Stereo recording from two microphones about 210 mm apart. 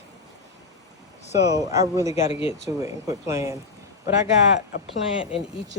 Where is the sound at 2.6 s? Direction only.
15° right (ahead or behind).